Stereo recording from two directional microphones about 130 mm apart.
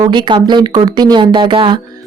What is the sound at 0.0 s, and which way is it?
Speech, 35° right (ahead or behind).